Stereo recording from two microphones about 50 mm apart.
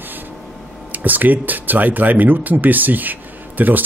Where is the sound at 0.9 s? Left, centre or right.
Right.